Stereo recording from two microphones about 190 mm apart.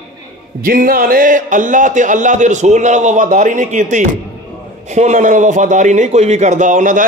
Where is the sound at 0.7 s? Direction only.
50° right (ahead or behind).